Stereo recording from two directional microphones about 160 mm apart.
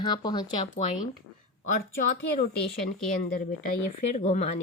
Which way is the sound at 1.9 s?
75° left (ahead or behind).